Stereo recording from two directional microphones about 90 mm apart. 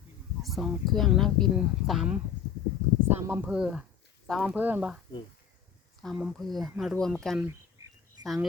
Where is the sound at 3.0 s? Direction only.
25° right (ahead or behind).